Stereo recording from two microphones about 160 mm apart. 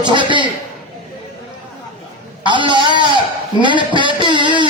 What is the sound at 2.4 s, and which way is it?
A man's voice, 30° right (ahead or behind).